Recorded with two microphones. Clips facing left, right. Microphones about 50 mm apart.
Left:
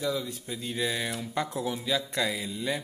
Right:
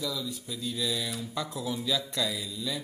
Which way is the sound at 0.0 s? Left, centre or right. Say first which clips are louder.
Left 3 dB; left.